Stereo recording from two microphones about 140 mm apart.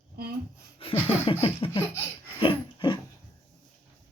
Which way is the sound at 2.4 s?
35° left (ahead or behind).